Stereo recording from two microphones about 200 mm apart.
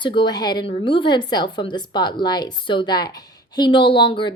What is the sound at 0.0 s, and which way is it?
Speech, 25° left (ahead or behind).